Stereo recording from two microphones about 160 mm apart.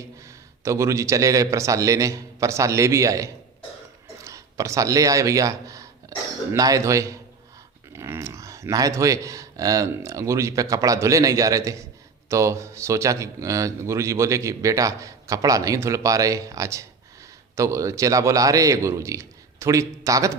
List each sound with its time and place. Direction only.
0.3 s a man's voice: 20° right (ahead or behind)